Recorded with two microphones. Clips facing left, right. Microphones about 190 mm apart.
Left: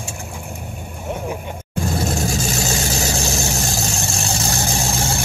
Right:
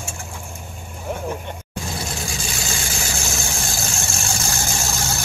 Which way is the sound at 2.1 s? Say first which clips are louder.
Left 8 dB; 40° left (ahead or behind).